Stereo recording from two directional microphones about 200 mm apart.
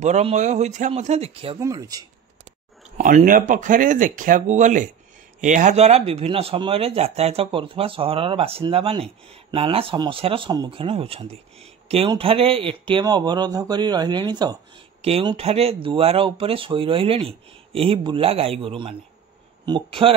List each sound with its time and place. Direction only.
0.0 s speech: 35° right (ahead or behind)
1.6 s speech: 15° right (ahead or behind)
3.0 s speech: 45° right (ahead or behind); by 20.2 s 25° right (ahead or behind)